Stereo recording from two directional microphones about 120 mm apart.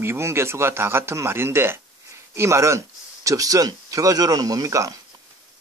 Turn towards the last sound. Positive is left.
turn(degrees=-30)  # may be behind; listen again after turning